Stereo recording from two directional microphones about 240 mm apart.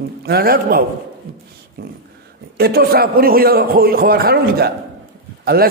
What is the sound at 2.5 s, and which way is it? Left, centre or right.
A man's voice, right.